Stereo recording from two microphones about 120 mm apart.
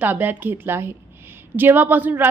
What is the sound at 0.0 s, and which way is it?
A woman's voice, 15° right (ahead or behind).